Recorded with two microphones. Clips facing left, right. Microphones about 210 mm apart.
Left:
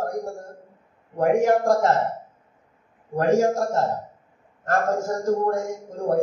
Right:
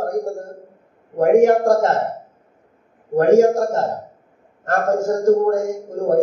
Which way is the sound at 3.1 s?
50° right (ahead or behind).